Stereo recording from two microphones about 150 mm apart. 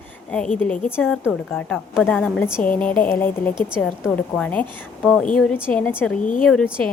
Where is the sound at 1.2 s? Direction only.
Centre (ahead or behind).